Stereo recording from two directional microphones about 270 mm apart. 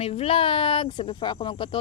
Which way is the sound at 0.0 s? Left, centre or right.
Left.